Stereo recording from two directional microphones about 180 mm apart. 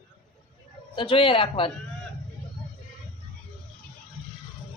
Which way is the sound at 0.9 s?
30° left (ahead or behind).